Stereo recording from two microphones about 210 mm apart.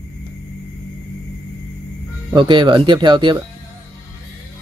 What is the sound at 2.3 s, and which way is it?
Speech, 20° right (ahead or behind).